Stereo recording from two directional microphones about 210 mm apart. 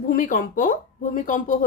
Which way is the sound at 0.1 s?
40° left (ahead or behind).